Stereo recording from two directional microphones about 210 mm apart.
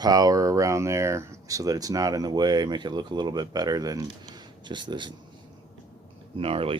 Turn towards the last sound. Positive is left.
turn(degrees=-25)  # may be behind; listen again after turning